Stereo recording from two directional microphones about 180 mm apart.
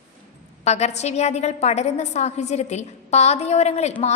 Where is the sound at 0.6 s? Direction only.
40° left (ahead or behind).